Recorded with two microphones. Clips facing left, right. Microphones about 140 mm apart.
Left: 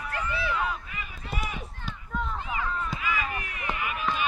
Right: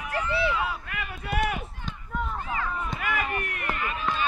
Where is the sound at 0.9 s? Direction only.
65° right (ahead or behind).